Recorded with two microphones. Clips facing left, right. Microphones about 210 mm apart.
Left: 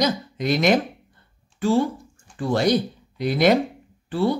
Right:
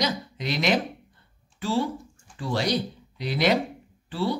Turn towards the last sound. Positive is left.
turn(degrees=50)  # may be behind; listen again after turning